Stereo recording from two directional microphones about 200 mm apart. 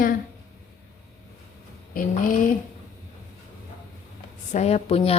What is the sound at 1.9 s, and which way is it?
Speech, 45° left (ahead or behind).